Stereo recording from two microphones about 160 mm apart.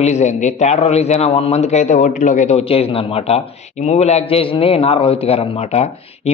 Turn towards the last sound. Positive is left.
turn(degrees=40)  # may be behind; listen again after turning